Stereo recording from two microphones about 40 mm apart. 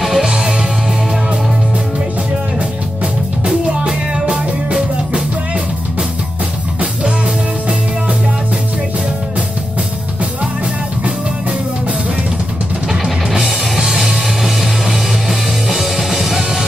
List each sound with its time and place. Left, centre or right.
0.0 s music: centre
3.4 s music: right
13.0 s music: centre